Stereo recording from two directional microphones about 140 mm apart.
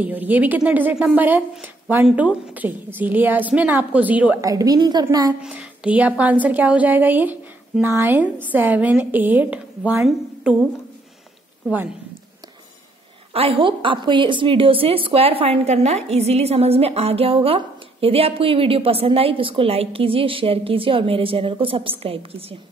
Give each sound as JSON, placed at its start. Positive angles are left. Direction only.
{"t": 0.0, "sound": "speech", "side_deg": -10}
{"t": 4.4, "sound": "a woman's voice", "side_deg": -25}
{"t": 5.4, "sound": "speech", "side_deg": -10}
{"t": 13.3, "sound": "a woman's voice", "side_deg": -40}